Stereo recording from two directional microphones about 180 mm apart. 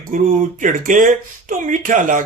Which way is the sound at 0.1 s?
50° right (ahead or behind).